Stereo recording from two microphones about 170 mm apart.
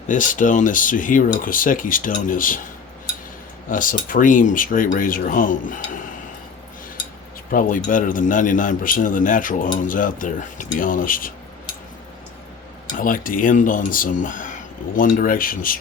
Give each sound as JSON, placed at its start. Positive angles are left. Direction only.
{"t": 0.1, "sound": "speech", "side_deg": 50}
{"t": 3.7, "sound": "speech", "side_deg": 50}
{"t": 7.5, "sound": "speech", "side_deg": 55}
{"t": 13.0, "sound": "speech", "side_deg": 55}